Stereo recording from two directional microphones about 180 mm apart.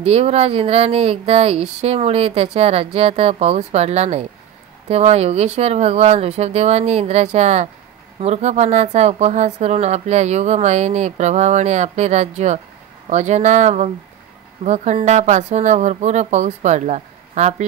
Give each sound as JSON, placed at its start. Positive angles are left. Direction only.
{"t": 0.0, "sound": "speech", "side_deg": -35}